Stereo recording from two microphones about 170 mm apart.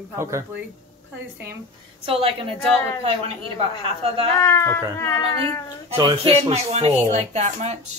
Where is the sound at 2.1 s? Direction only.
35° right (ahead or behind).